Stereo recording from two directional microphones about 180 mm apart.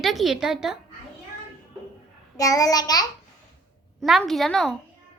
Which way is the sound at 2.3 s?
20° left (ahead or behind).